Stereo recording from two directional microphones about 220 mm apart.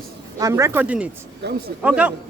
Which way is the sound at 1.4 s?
50° right (ahead or behind).